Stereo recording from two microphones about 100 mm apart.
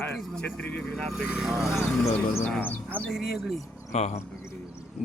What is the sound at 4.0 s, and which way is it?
Speech, 90° left.